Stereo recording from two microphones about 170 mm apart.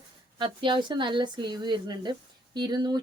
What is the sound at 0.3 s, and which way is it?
Speech, 30° right (ahead or behind).